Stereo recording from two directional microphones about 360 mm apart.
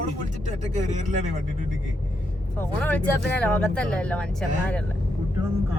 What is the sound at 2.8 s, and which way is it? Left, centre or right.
Speech, centre.